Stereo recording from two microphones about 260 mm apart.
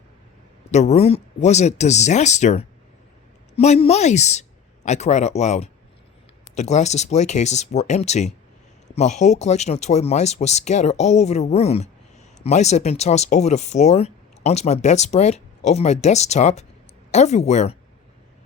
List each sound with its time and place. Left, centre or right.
0.7 s speech: left